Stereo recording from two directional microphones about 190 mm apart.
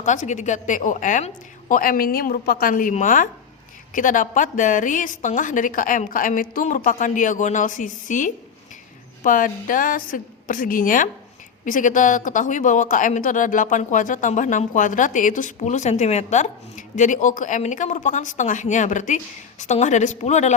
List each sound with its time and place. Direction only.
0.0 s a woman's voice: 40° left (ahead or behind)